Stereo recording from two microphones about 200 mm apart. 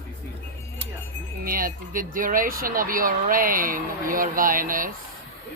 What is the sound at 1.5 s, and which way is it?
Speech, 45° right (ahead or behind).